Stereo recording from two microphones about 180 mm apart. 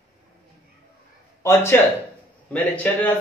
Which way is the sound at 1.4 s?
15° left (ahead or behind).